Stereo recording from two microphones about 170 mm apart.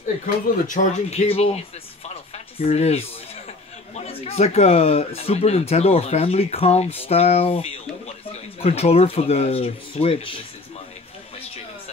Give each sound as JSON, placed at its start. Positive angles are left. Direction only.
{"t": 0.7, "sound": "speech", "side_deg": 45}
{"t": 2.0, "sound": "a sound", "side_deg": 40}
{"t": 3.9, "sound": "speech", "side_deg": 35}